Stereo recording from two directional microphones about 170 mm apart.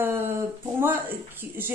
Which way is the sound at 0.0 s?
15° right (ahead or behind).